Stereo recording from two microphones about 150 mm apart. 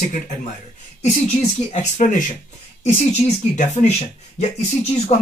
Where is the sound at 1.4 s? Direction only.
50° left (ahead or behind).